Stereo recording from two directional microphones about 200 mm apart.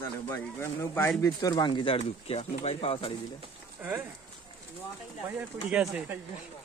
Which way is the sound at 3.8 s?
10° right (ahead or behind).